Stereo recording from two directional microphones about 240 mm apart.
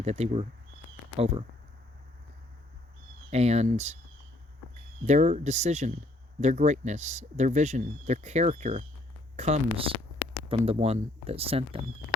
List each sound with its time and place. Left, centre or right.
0.0 s speech: right
3.2 s speech: right
5.0 s speech: right